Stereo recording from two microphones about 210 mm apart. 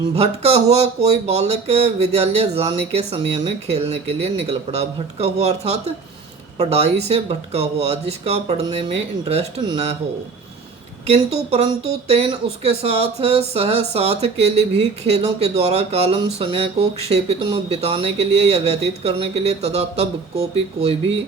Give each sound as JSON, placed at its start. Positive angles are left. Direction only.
{"t": 0.2, "sound": "speech", "side_deg": -30}
{"t": 11.0, "sound": "speech", "side_deg": -30}